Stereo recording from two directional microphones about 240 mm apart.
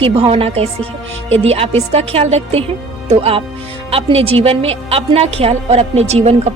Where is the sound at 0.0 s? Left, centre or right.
Right.